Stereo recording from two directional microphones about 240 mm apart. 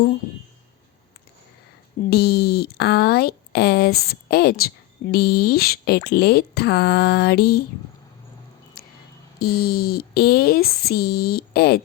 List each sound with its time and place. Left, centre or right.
2.0 s speech: left
8.8 s a sound: left
9.4 s speech: left